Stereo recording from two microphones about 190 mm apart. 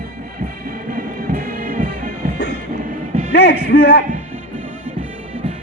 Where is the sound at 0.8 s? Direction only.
45° right (ahead or behind).